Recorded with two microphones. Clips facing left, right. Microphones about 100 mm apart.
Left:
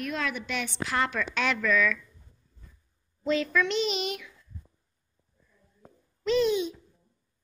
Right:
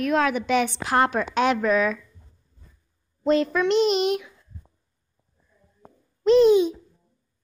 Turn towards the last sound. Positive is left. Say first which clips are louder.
# right 9 dB
turn(degrees=-45)  # may be behind; listen again after turning